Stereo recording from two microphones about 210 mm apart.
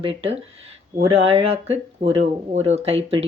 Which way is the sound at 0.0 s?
25° right (ahead or behind).